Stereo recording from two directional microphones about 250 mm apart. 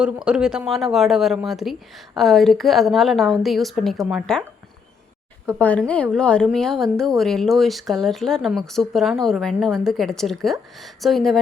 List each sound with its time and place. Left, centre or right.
0.3 s speech: centre
5.5 s speech: centre